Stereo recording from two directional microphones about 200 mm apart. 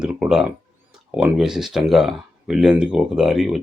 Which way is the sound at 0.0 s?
5° right (ahead or behind).